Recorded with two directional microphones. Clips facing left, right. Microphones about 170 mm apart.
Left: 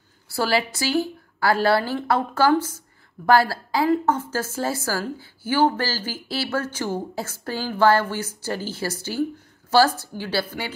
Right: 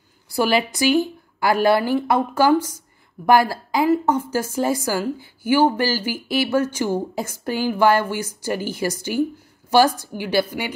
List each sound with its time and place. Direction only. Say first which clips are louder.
0.3 s a woman's voice: right 3 dB; 15° right (ahead or behind)